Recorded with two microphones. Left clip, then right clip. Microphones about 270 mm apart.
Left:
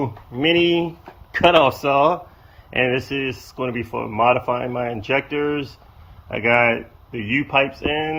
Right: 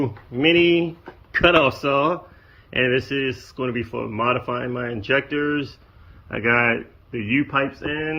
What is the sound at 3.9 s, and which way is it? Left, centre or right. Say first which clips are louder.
Speech: left 6 dB; centre.